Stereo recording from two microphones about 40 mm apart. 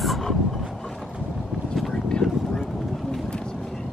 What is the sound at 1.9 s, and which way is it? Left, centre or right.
Boat, left.